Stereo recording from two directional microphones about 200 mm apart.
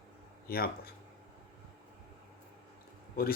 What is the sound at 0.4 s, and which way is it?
Speech, 50° left (ahead or behind).